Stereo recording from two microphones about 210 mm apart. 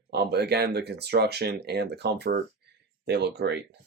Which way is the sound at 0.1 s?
50° right (ahead or behind).